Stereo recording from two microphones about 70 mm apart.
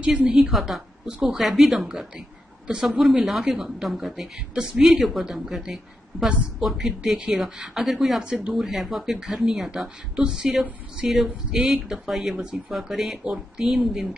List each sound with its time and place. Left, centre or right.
0.0 s speech: centre
0.4 s a woman's voice: centre